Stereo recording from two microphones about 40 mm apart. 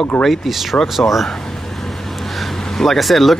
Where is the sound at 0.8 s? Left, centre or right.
Centre.